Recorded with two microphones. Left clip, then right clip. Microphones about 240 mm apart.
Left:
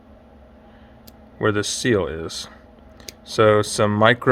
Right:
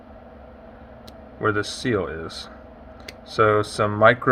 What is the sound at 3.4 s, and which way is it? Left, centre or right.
Speech, left.